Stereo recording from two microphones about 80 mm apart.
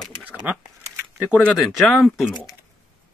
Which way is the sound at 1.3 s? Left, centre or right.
Left.